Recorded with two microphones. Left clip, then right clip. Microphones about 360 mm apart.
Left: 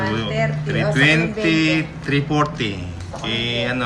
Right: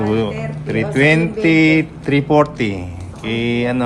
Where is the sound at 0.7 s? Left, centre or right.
Centre.